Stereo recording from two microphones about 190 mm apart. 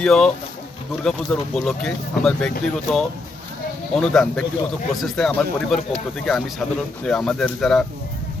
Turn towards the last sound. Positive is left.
turn(degrees=0)  # may be behind; listen again after turning